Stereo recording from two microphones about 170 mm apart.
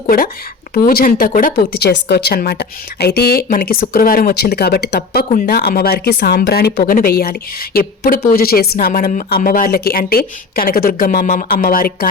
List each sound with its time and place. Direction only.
0.7 s speech: 60° left (ahead or behind)